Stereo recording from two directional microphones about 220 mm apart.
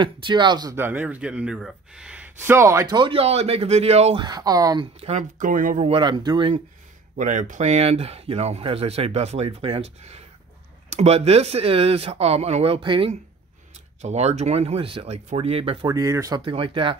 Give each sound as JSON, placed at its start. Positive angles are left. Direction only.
{"t": 0.0, "sound": "a man's voice", "side_deg": -20}
{"t": 5.0, "sound": "speech", "side_deg": -35}
{"t": 5.9, "sound": "speech", "side_deg": -20}
{"t": 7.2, "sound": "speech", "side_deg": -35}
{"t": 10.9, "sound": "speech", "side_deg": -30}